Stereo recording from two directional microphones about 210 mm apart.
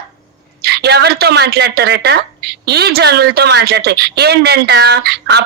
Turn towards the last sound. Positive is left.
turn(degrees=-50)  # may be behind; listen again after turning